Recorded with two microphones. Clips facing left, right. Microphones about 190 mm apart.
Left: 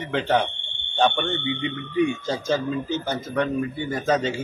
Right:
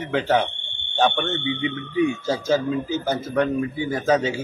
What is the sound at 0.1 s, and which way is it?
A man's voice, 5° right (ahead or behind).